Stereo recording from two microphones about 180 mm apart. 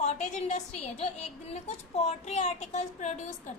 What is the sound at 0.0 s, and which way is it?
A woman's voice, 40° left (ahead or behind).